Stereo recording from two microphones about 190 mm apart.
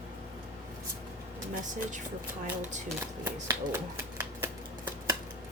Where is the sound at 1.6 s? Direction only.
40° right (ahead or behind).